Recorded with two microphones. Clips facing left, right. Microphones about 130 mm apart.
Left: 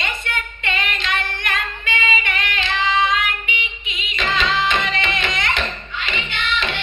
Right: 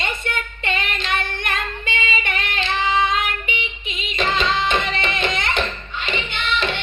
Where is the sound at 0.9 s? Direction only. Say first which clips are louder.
Even; 50° right (ahead or behind).